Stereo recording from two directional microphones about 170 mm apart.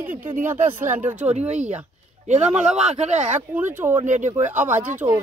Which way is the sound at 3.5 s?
15° right (ahead or behind).